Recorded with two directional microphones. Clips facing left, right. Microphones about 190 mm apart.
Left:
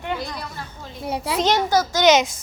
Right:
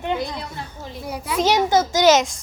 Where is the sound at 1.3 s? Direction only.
10° right (ahead or behind).